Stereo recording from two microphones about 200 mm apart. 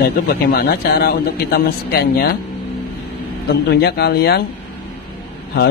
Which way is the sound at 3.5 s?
55° left (ahead or behind).